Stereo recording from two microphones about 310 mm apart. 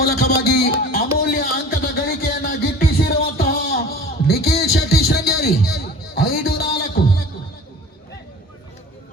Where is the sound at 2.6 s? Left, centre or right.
Left.